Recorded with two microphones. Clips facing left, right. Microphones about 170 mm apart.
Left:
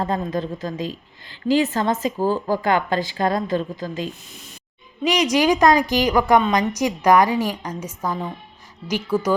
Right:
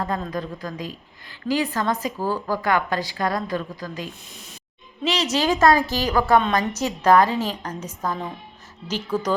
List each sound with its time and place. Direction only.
0.0 s a woman's voice: 25° left (ahead or behind)
5.0 s a woman's voice: 15° left (ahead or behind)